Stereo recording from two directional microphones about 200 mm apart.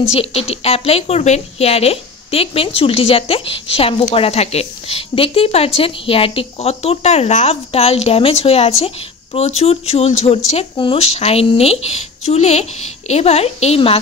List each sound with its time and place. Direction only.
0.1 s speech: 30° left (ahead or behind)